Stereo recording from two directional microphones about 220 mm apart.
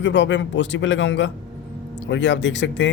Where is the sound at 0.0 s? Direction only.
55° left (ahead or behind).